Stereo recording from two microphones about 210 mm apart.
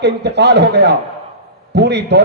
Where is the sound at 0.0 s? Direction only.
55° right (ahead or behind).